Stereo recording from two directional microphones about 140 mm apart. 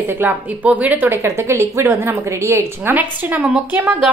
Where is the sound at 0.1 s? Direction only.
15° right (ahead or behind).